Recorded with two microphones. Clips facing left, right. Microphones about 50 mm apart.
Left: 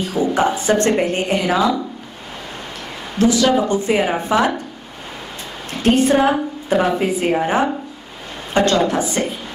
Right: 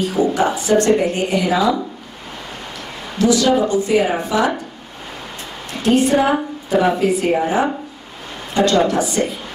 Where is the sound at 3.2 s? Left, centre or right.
Left.